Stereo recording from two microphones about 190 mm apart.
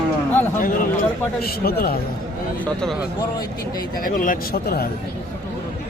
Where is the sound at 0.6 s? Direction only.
45° left (ahead or behind).